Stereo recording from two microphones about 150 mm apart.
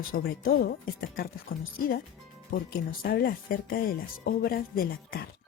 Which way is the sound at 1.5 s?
75° left (ahead or behind).